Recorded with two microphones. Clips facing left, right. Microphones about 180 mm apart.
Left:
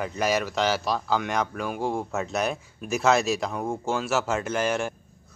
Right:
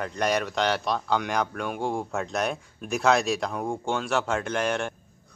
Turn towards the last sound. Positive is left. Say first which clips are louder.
# left 1 dB
turn(degrees=5)  # may be behind; listen again after turning